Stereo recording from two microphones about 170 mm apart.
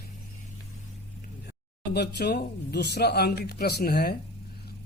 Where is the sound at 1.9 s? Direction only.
80° left.